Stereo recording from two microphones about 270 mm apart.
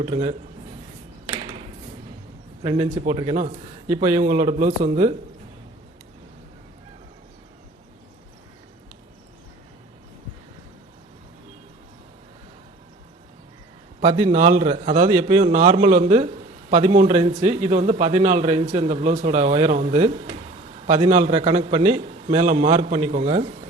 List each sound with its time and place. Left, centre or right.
0.0 s a man's voice: right
1.3 s a sound: centre
2.6 s a man's voice: centre
14.0 s a man's voice: centre